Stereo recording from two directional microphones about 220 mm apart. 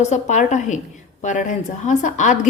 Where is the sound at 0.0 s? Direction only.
30° left (ahead or behind).